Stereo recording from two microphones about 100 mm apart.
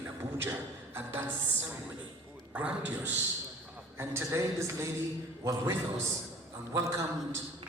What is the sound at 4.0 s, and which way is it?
A man's voice, 25° right (ahead or behind).